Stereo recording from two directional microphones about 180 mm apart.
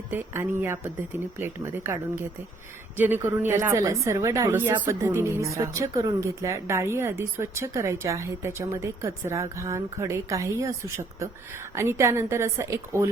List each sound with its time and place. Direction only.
0.1 s a woman's voice: 10° right (ahead or behind)
3.0 s a woman's voice: 10° right (ahead or behind)